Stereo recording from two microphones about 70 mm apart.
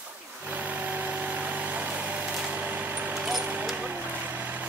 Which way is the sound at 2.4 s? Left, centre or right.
Right.